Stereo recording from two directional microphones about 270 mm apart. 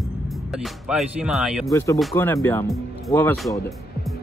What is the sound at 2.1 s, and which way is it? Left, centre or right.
Speech, centre.